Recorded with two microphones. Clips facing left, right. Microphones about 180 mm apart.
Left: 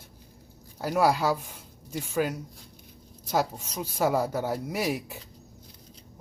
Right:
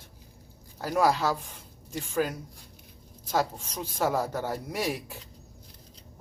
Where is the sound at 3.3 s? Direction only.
10° left (ahead or behind).